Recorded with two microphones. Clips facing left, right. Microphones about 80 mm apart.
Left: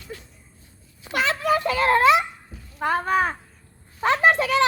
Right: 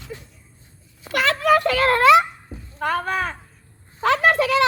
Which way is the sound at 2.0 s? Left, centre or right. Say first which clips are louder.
Right 5 dB; right.